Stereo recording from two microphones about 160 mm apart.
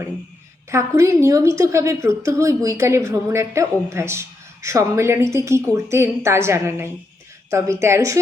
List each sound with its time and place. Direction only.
0.7 s a woman's voice: 20° right (ahead or behind)